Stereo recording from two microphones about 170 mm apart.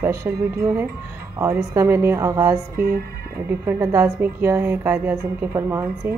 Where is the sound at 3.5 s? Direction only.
15° right (ahead or behind).